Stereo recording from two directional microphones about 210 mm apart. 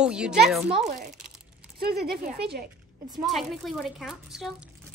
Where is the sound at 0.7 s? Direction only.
35° right (ahead or behind).